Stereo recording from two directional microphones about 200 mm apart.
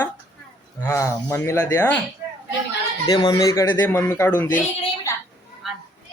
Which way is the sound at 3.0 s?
20° left (ahead or behind).